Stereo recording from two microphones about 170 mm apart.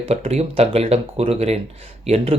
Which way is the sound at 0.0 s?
35° right (ahead or behind).